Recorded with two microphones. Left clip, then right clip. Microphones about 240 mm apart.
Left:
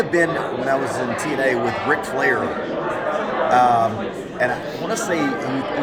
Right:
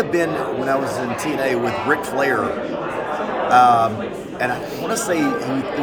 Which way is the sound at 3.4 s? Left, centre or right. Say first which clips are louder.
Right 3 dB; centre.